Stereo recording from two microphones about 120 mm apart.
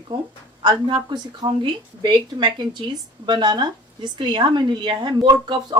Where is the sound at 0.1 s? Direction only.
35° right (ahead or behind).